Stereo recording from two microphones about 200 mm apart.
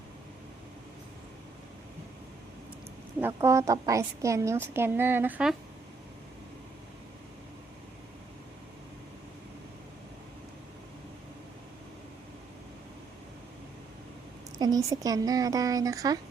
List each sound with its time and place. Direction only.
3.2 s a woman's voice: 10° right (ahead or behind)
14.6 s a woman's voice: 15° right (ahead or behind)